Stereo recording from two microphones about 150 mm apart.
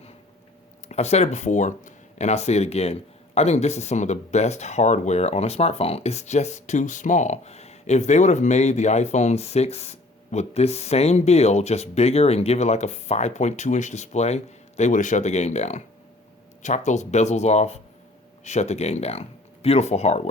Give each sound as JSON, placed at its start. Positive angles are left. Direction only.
{"t": 0.9, "sound": "speech", "side_deg": 45}